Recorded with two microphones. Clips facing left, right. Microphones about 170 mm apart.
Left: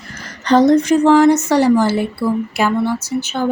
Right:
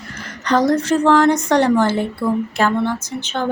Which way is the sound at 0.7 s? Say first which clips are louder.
Left 4 dB; 15° left (ahead or behind).